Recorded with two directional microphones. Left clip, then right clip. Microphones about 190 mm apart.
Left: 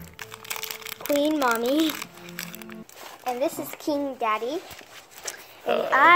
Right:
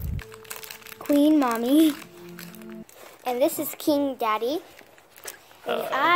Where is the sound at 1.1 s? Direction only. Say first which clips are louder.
Right 2 dB; 30° right (ahead or behind).